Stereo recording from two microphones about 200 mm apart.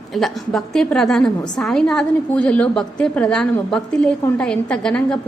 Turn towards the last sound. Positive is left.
turn(degrees=5)  # may be behind; listen again after turning